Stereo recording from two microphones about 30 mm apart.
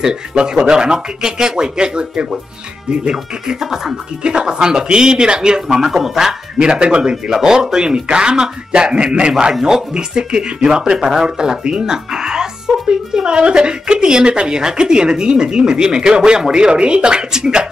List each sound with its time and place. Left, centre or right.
0.0 s speech: right
3.5 s speech: centre
4.2 s speech: right
5.7 s speech: centre
6.6 s speech: right
7.2 s speech: centre; by 9.3 s right
9.4 s speech: centre